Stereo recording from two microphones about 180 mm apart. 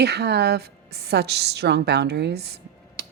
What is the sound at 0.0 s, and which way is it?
A woman's voice, 65° right (ahead or behind).